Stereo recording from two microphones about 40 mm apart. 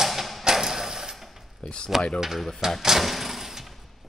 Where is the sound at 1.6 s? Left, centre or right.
Left.